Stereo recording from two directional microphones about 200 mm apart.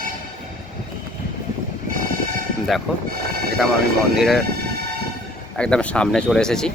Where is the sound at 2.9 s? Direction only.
5° right (ahead or behind).